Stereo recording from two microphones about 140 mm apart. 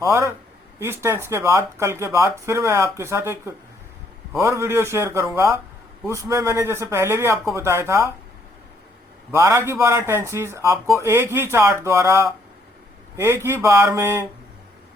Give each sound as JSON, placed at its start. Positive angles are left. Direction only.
{"t": 0.1, "sound": "speech", "side_deg": -20}
{"t": 9.3, "sound": "speech", "side_deg": -20}